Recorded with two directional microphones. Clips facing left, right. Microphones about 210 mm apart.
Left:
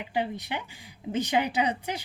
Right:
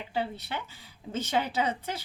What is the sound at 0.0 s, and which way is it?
Speech, 15° left (ahead or behind).